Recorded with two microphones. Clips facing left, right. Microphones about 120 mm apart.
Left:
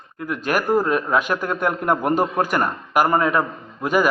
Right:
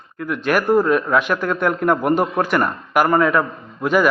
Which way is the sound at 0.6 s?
10° left (ahead or behind).